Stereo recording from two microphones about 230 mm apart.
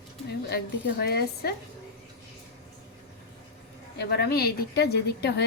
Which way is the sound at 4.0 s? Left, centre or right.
Left.